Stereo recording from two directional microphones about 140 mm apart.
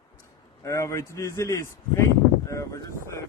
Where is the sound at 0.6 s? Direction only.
20° left (ahead or behind).